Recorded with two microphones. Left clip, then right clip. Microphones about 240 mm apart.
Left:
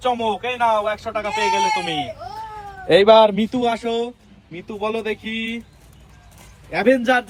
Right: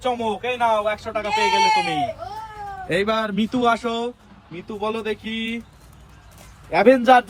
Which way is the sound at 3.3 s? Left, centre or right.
Centre.